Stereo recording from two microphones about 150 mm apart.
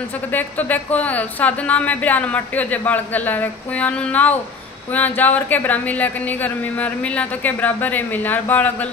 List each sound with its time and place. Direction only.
0.3 s speech: 10° left (ahead or behind)